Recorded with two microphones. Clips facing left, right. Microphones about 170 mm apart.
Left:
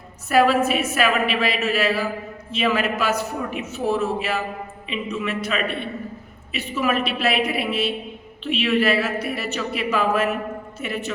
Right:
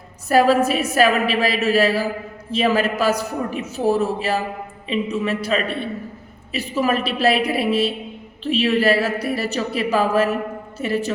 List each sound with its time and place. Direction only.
0.3 s a man's voice: 35° right (ahead or behind)